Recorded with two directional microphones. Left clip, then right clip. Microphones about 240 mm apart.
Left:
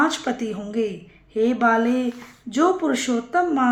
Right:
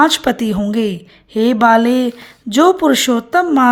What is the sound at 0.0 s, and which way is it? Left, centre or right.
A woman's voice, right.